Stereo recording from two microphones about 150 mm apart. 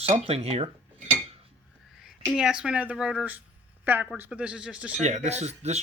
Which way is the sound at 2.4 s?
5° right (ahead or behind).